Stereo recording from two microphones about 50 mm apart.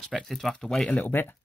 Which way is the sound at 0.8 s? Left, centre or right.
Left.